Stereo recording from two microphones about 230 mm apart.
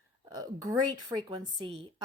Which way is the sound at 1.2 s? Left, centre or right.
Centre.